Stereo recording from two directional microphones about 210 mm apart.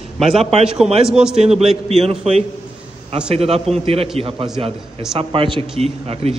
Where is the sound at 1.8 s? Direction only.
30° right (ahead or behind).